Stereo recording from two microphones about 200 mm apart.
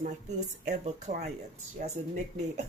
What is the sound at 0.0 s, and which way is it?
A woman's voice, 35° right (ahead or behind).